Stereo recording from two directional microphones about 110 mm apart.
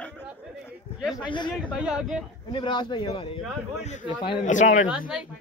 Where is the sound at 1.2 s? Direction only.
45° left (ahead or behind).